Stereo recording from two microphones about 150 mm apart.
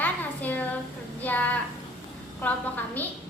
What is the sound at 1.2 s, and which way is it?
A woman's voice, 10° left (ahead or behind).